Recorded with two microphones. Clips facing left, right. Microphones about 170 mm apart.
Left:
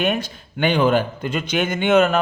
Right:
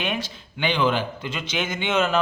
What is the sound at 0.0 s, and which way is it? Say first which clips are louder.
A man's voice: left 6 dB; 50° left (ahead or behind).